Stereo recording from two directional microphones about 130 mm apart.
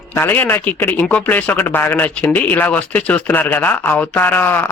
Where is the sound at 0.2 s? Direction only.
15° left (ahead or behind).